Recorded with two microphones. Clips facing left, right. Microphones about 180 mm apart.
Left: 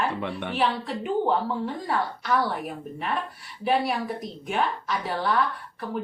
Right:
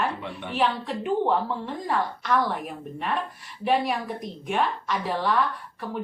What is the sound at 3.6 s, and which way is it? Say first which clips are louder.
A woman's voice: even; centre (ahead or behind).